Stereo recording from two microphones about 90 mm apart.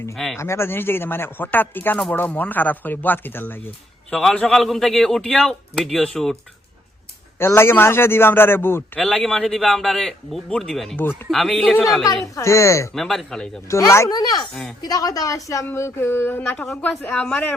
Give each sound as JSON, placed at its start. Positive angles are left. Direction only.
{"t": 0.3, "sound": "speech", "side_deg": 30}
{"t": 4.1, "sound": "a man's voice", "side_deg": 5}
{"t": 7.3, "sound": "speech", "side_deg": 25}
{"t": 9.0, "sound": "a man's voice", "side_deg": 5}
{"t": 12.0, "sound": "a woman's voice", "side_deg": 35}
{"t": 12.9, "sound": "a man's voice", "side_deg": 0}
{"t": 13.7, "sound": "a woman's voice", "side_deg": 35}
{"t": 14.1, "sound": "a woman's voice", "side_deg": 50}
{"t": 14.5, "sound": "speech", "side_deg": 5}
{"t": 14.8, "sound": "a woman's voice", "side_deg": 45}